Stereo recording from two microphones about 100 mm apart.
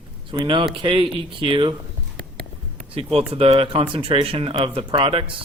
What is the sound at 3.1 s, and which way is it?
Speech, 75° right (ahead or behind).